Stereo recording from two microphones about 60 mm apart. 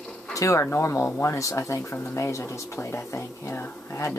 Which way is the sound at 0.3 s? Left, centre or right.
Left.